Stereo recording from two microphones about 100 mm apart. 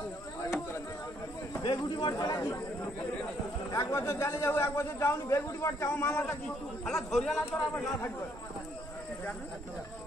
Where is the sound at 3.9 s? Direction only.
25° left (ahead or behind).